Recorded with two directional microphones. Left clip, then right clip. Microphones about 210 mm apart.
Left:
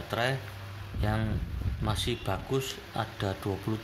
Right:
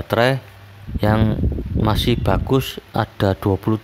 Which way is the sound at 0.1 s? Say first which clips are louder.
Right 13 dB; 50° right (ahead or behind).